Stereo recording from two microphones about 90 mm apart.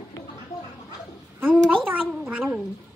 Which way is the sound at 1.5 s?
20° right (ahead or behind).